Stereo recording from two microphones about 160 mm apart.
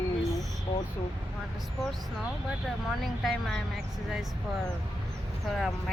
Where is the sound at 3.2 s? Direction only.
Centre (ahead or behind).